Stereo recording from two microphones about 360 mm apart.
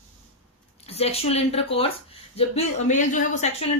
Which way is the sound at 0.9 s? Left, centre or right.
Centre.